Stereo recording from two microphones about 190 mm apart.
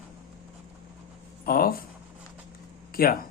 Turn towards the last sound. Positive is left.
turn(degrees=50)  # may be behind; listen again after turning